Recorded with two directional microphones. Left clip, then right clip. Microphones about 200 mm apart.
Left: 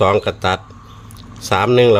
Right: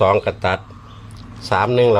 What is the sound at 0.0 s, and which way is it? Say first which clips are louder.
A man's voice: left 1 dB; 30° left (ahead or behind).